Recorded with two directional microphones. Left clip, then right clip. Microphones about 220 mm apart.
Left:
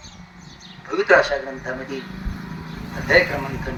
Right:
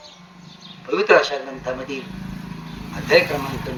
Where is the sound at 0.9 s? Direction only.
45° right (ahead or behind).